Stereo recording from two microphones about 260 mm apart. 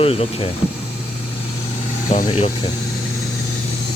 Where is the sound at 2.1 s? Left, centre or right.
Left.